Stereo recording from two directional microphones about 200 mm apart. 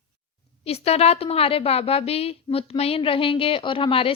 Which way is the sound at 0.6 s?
30° left (ahead or behind).